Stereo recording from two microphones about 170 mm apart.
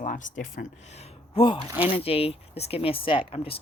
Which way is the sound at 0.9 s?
35° left (ahead or behind).